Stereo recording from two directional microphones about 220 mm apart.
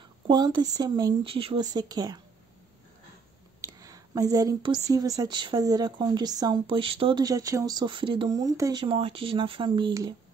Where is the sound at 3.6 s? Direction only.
15° right (ahead or behind).